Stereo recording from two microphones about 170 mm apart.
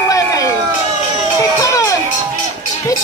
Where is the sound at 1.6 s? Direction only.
20° left (ahead or behind).